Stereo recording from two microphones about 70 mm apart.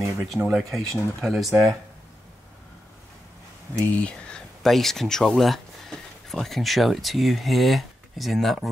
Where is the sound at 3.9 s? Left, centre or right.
Centre.